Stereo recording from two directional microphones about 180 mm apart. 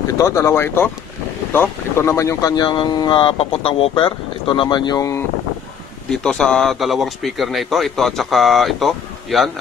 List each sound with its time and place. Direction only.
0.2 s speech: 15° left (ahead or behind)
6.0 s speech: 5° left (ahead or behind)